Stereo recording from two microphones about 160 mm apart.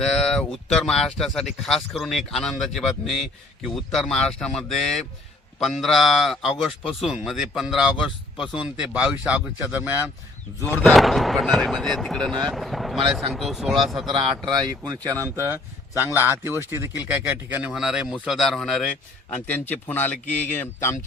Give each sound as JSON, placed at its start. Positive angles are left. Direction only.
{"t": 0.0, "sound": "speech", "side_deg": 5}
{"t": 10.8, "sound": "speech", "side_deg": 0}
{"t": 14.1, "sound": "speech", "side_deg": -30}